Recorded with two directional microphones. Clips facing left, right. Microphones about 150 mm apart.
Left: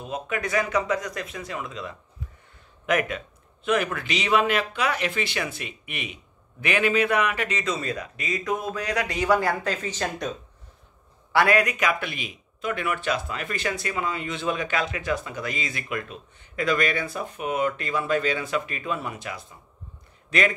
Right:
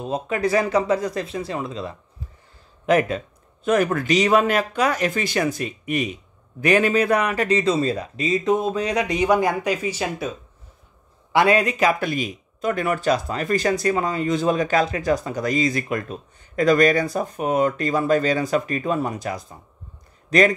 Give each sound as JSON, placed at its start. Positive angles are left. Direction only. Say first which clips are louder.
{"t": 0.0, "sound": "speech", "louder": "right 7 dB", "side_deg": -30}
{"t": 11.3, "sound": "speech", "louder": "right 3 dB", "side_deg": -25}